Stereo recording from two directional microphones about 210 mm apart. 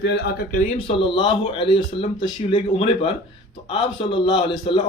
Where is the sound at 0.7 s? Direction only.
25° left (ahead or behind).